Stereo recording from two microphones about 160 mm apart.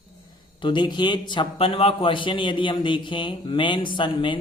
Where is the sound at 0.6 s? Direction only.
30° left (ahead or behind).